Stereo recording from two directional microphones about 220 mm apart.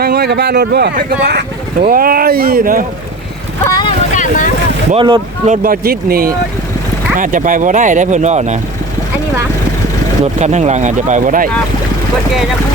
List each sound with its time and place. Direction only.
0.0 s speech: 50° right (ahead or behind)
3.6 s boat: 15° left (ahead or behind)
4.1 s boat: 35° left (ahead or behind)
4.9 s speech: 25° right (ahead or behind)
5.6 s speech: 40° right (ahead or behind)
10.4 s speech: 30° right (ahead or behind)